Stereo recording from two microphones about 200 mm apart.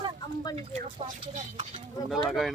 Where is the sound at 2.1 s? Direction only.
Centre (ahead or behind).